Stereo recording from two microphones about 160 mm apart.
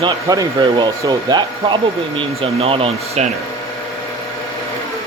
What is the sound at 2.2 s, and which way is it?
Speech, 35° right (ahead or behind).